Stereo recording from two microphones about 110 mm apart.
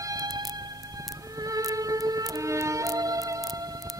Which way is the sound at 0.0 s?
35° right (ahead or behind).